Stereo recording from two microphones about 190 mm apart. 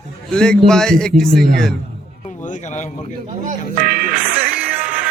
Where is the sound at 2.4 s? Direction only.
40° left (ahead or behind).